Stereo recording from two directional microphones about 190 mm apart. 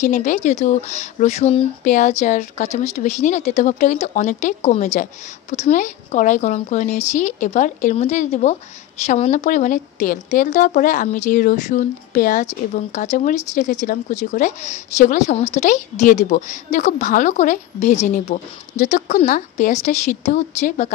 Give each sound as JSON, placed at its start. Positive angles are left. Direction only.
{"t": 0.0, "sound": "speech", "side_deg": 40}